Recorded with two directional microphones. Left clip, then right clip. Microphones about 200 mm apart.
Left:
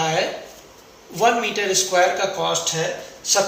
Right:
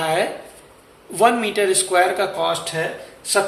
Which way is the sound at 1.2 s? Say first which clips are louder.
Right 2 dB; 55° right (ahead or behind).